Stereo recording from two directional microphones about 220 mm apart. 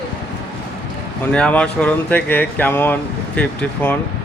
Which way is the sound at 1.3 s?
5° left (ahead or behind).